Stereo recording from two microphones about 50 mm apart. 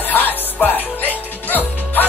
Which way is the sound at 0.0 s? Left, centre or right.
Left.